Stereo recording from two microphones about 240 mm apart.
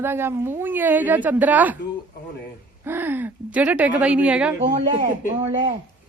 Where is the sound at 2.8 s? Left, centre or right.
Centre.